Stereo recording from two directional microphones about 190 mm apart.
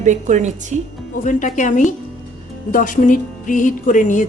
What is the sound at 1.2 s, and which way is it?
A woman's voice, 40° left (ahead or behind).